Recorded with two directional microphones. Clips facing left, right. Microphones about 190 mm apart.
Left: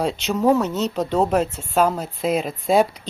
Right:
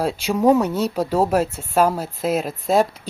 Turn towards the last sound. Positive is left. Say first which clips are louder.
# left 1 dB
turn(degrees=0)  # may be behind; listen again after turning